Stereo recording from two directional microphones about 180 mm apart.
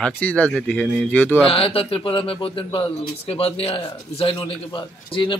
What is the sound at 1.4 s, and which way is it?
Speech, 30° left (ahead or behind).